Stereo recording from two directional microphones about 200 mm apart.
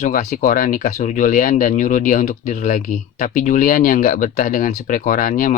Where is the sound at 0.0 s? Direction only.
40° left (ahead or behind).